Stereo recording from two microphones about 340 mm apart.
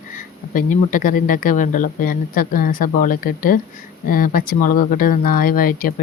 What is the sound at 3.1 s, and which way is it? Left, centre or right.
Speech, left.